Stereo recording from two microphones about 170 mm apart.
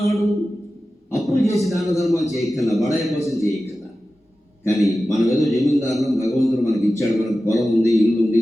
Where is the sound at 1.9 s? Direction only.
20° left (ahead or behind).